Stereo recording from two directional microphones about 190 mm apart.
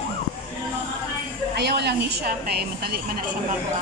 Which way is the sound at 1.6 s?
60° right (ahead or behind).